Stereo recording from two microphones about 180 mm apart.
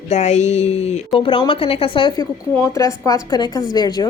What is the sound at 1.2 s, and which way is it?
A woman's voice, 25° left (ahead or behind).